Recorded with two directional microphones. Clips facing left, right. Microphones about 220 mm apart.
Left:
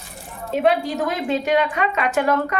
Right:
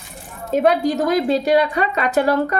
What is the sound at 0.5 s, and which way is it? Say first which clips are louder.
A woman's voice: right 3 dB; 40° right (ahead or behind).